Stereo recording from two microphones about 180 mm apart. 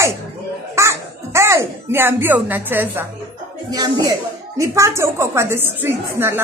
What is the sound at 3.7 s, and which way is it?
Speech, 20° right (ahead or behind).